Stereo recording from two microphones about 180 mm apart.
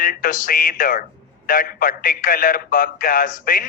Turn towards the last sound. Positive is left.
turn(degrees=50)  # may be behind; listen again after turning